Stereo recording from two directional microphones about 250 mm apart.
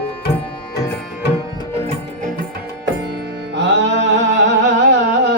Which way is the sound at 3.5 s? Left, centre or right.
Right.